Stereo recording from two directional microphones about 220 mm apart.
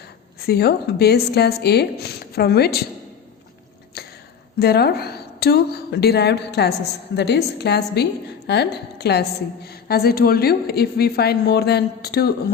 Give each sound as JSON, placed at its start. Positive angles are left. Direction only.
{"t": 0.3, "sound": "a woman's voice", "side_deg": 45}
{"t": 4.0, "sound": "a sound", "side_deg": 45}
{"t": 4.6, "sound": "a woman's voice", "side_deg": 45}